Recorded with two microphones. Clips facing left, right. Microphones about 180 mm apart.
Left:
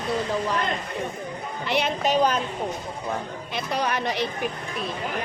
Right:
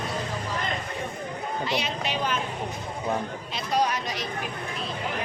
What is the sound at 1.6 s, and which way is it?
Speech, 60° left (ahead or behind).